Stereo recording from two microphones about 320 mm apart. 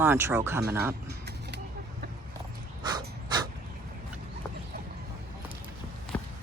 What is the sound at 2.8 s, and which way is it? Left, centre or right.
Breathing, centre.